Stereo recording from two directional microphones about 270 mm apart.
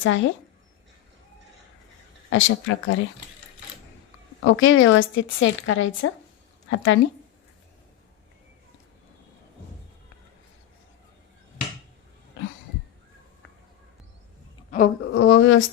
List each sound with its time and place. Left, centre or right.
0.0 s a woman's voice: left
2.3 s a woman's voice: left
4.4 s a woman's voice: left
14.7 s speech: left